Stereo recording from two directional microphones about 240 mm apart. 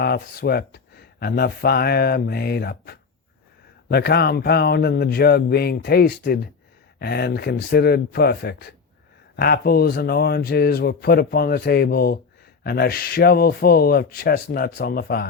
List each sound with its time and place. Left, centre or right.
0.0 s speech: left